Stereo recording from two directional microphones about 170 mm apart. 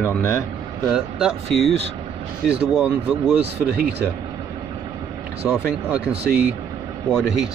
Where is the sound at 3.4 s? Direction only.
80° right.